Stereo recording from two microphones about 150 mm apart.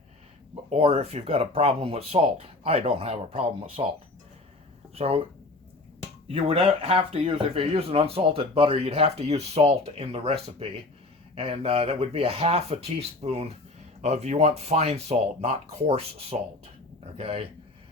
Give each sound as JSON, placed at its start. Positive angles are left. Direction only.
{"t": 0.7, "sound": "speech", "side_deg": -40}
{"t": 4.9, "sound": "speech", "side_deg": -40}